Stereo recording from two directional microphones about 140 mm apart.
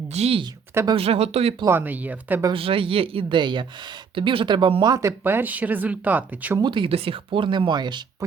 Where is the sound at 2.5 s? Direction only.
40° right (ahead or behind); by 6.6 s 10° right (ahead or behind).